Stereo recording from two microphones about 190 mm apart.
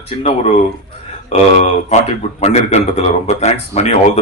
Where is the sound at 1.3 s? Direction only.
35° left (ahead or behind).